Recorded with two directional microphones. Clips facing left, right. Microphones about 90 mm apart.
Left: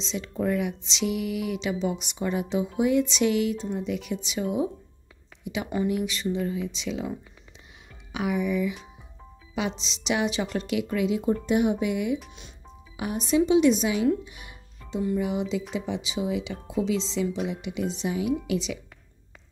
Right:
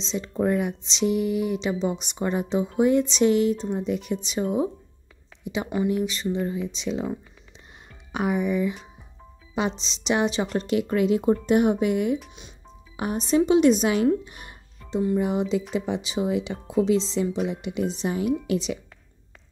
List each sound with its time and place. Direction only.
0.0 s speech: 30° right (ahead or behind)
6.7 s speech: 35° right (ahead or behind)
13.5 s speech: 50° right (ahead or behind)